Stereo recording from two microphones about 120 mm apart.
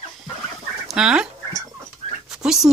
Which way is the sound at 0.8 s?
5° right (ahead or behind).